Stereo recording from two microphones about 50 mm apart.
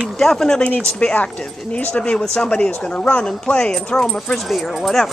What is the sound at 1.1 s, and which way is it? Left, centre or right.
Speech, left.